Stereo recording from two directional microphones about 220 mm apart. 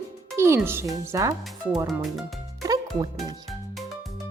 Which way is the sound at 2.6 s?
15° right (ahead or behind).